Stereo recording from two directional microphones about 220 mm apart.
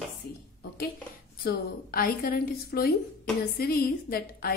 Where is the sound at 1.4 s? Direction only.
40° left (ahead or behind).